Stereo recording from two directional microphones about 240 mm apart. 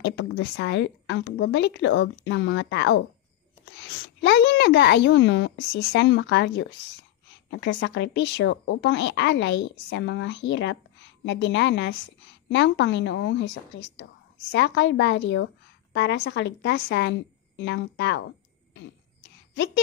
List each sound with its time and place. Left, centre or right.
0.0 s a woman's voice: left
14.5 s a woman's voice: left
19.5 s a woman's voice: left